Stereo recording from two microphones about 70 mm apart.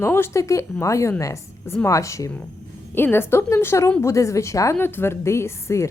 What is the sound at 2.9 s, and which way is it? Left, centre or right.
A woman's voice, left.